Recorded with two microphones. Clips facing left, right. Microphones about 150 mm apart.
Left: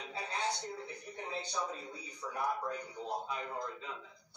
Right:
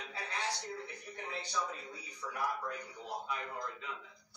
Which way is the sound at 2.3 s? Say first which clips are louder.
Left 2 dB; 25° left (ahead or behind).